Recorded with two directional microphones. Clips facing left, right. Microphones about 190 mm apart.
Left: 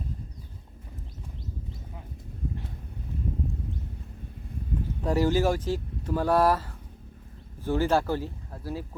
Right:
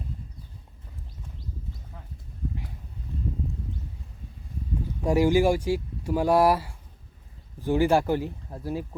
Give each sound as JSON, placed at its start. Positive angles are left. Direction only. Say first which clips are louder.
{"t": 5.0, "sound": "speech", "louder": "right 3 dB", "side_deg": -15}